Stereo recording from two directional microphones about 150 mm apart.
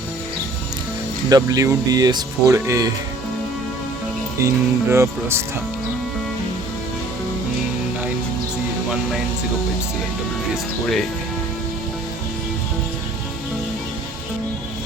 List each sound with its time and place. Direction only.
1.3 s speech: 25° right (ahead or behind)
4.4 s speech: 20° right (ahead or behind)